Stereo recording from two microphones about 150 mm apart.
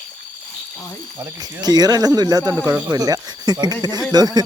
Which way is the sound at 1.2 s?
25° right (ahead or behind).